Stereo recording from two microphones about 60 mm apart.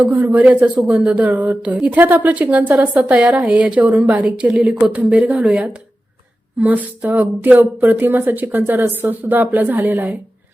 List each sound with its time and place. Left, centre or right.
0.0 s a woman's voice: right